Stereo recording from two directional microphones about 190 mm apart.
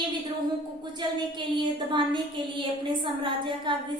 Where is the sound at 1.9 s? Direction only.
25° right (ahead or behind).